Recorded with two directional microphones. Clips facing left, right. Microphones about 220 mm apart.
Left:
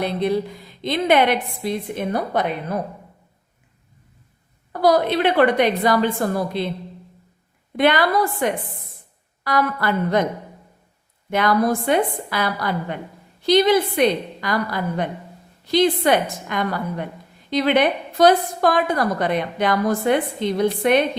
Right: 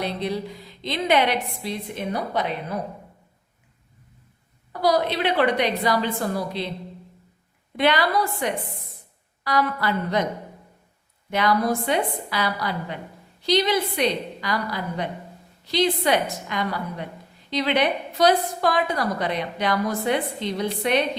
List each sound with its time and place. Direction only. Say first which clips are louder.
0.0 s a woman's voice: left 6 dB; 50° left (ahead or behind)
4.7 s a woman's voice: left 4 dB; 50° left (ahead or behind)
7.8 s a woman's voice: left 4 dB; 50° left (ahead or behind)
11.3 s a woman's voice: left 3 dB; 50° left (ahead or behind)